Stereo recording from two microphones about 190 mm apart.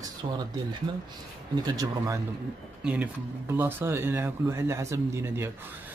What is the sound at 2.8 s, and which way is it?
Speech, 5° right (ahead or behind).